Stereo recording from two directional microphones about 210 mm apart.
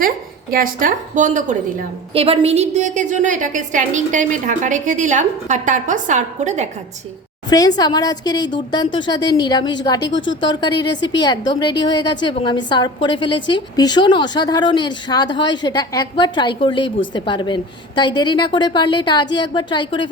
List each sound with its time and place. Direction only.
0.5 s a woman's voice: 40° right (ahead or behind)
7.5 s a woman's voice: 20° left (ahead or behind)
10.1 s speech: 65° left (ahead or behind)
10.4 s a woman's voice: 20° left (ahead or behind)